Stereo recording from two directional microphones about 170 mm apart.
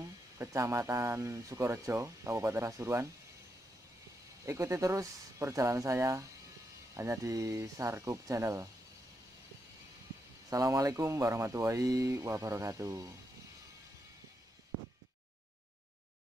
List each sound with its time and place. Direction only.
0.0 s speech: 15° right (ahead or behind)
4.5 s speech: 15° right (ahead or behind)
10.5 s speech: 20° right (ahead or behind)